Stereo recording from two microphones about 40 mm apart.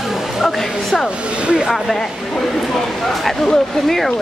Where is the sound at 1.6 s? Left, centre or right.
Centre.